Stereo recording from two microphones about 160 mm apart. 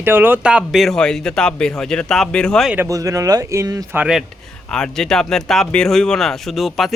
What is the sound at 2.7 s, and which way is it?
Speech, 15° right (ahead or behind).